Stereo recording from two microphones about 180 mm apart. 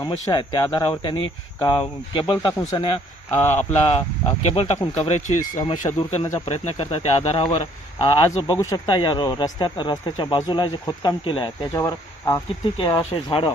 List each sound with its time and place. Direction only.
0.0 s speech: 20° left (ahead or behind)
3.8 s speech: 35° left (ahead or behind)